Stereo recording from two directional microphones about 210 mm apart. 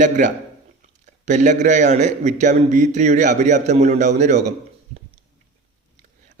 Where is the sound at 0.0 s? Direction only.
35° right (ahead or behind).